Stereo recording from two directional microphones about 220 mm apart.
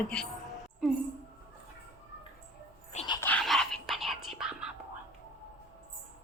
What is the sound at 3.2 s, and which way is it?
Whispering, 5° left (ahead or behind).